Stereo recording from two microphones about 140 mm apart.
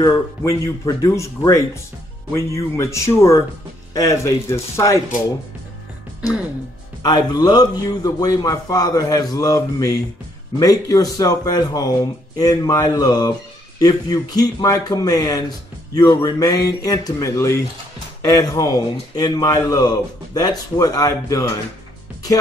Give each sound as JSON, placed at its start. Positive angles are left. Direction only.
{"t": 0.5, "sound": "speech", "side_deg": 25}
{"t": 7.0, "sound": "speech", "side_deg": 30}